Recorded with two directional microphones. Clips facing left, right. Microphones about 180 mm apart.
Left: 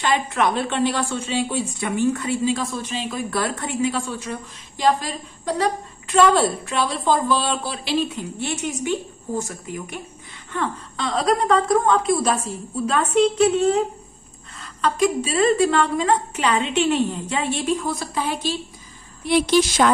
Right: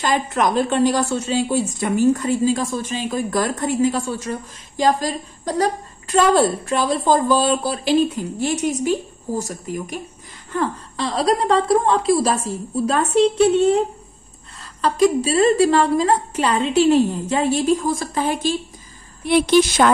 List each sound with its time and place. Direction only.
0.0 s a woman's voice: 40° right (ahead or behind)
14.6 s a woman's voice: 35° right (ahead or behind); by 19.9 s 55° right (ahead or behind)